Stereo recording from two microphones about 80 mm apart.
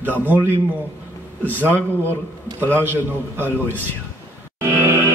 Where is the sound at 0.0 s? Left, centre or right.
Right.